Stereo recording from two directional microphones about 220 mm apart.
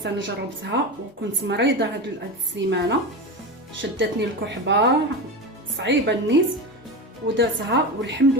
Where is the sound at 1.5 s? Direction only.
55° right (ahead or behind).